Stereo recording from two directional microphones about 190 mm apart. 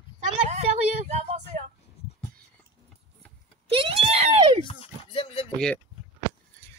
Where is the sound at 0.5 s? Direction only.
35° right (ahead or behind).